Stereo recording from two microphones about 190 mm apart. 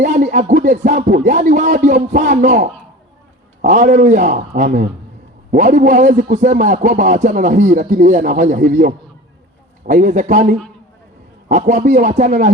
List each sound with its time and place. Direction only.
0.0 s music: 40° right (ahead or behind)
5.5 s a man's voice: 40° right (ahead or behind)
9.8 s music: 40° right (ahead or behind)